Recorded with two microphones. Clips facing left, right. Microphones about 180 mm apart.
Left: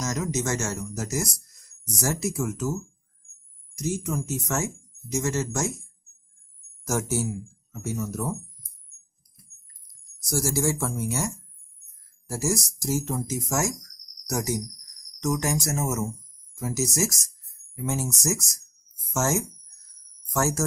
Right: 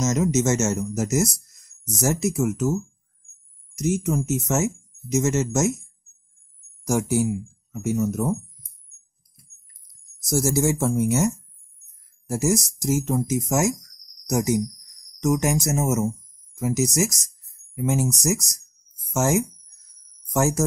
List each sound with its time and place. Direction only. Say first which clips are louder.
0.0 s speech: right 7 dB; 20° right (ahead or behind)
6.8 s speech: right 5 dB; 15° right (ahead or behind)
10.3 s speech: right 4 dB; 20° right (ahead or behind)